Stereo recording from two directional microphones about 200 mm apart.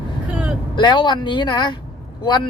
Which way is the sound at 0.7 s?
25° left (ahead or behind).